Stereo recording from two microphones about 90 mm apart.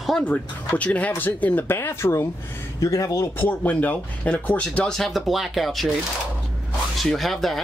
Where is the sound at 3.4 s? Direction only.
15° left (ahead or behind); by 5.8 s centre (ahead or behind).